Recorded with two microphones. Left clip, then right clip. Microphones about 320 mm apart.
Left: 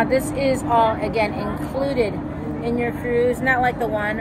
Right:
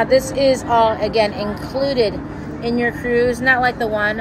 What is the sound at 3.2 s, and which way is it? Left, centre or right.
Speech, right.